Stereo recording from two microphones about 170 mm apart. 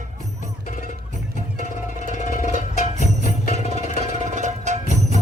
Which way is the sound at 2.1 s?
50° left (ahead or behind).